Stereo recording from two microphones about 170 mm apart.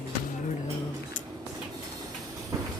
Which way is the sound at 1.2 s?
50° left (ahead or behind).